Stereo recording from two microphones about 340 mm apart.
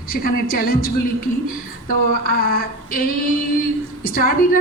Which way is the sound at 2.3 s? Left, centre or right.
Left.